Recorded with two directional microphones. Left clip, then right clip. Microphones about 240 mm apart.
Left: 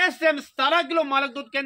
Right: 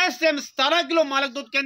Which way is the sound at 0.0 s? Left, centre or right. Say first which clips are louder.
Even; right.